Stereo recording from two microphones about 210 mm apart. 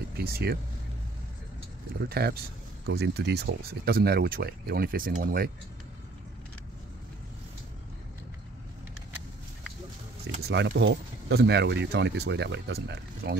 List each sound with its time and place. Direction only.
0.2 s speech: 45° right (ahead or behind)
2.0 s speech: 50° right (ahead or behind)
10.4 s speech: 55° right (ahead or behind)